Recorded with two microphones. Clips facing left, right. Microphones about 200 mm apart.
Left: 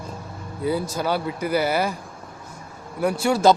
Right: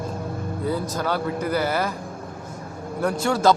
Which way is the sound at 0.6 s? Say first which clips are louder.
Left 2 dB; 10° left (ahead or behind).